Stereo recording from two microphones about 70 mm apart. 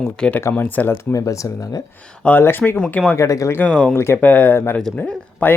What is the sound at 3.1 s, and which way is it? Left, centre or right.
Speech, left.